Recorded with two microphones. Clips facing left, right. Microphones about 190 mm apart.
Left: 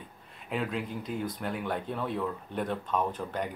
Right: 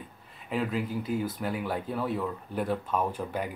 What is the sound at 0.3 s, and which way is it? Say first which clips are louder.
Speech: right 2 dB; centre (ahead or behind).